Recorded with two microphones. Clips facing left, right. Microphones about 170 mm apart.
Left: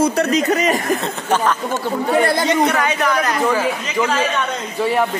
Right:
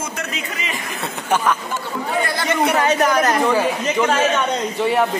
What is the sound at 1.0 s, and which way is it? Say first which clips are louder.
Speech: left 2 dB; 10° right (ahead or behind).